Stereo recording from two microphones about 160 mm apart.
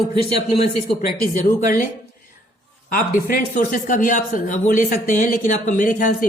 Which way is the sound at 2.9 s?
65° left (ahead or behind).